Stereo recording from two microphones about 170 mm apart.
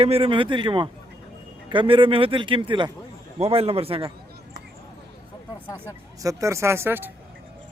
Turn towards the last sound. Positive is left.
turn(degrees=-15)  # may be behind; listen again after turning